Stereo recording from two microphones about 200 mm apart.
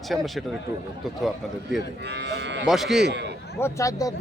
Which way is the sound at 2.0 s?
60° right (ahead or behind).